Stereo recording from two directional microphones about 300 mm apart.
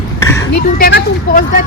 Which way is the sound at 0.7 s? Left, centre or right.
Left.